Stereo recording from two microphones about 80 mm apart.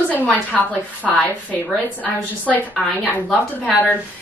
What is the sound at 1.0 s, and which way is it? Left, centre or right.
Speech, centre.